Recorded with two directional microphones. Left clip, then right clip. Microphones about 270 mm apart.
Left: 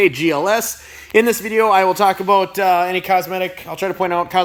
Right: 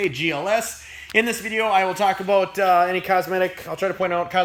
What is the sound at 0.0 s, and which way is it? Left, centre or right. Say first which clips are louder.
Speech: left 8 dB; centre.